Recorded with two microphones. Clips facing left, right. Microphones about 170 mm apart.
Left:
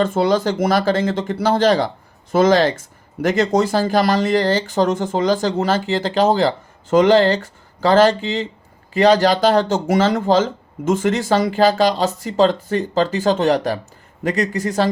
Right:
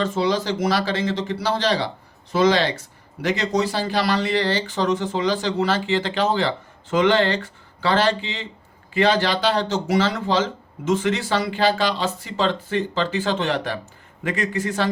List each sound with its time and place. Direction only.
0.0 s speech: 50° left (ahead or behind)